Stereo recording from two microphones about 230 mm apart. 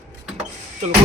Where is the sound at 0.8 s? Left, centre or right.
Right.